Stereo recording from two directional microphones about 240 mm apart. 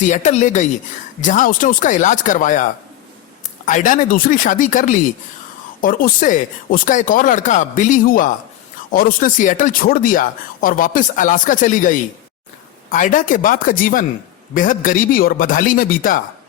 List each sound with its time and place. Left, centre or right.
0.0 s speech: left
3.7 s speech: left